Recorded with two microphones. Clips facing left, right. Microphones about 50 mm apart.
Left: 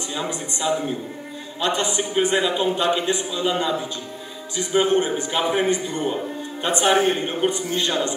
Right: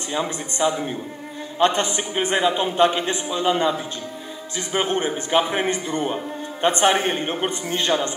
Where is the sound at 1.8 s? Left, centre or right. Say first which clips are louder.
Left 2 dB; right.